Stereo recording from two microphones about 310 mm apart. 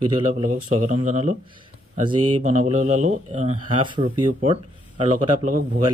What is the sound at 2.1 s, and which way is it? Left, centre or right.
Speech, right.